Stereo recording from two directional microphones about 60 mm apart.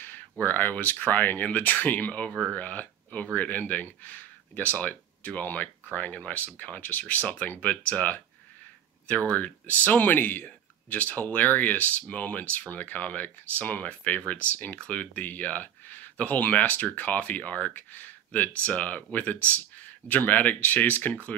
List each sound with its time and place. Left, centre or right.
0.0 s speech: left
9.3 s speech: left